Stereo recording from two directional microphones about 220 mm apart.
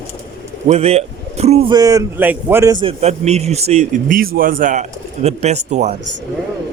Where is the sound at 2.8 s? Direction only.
30° right (ahead or behind).